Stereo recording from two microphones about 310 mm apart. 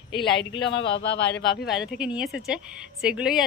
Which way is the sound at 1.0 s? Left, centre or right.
Left.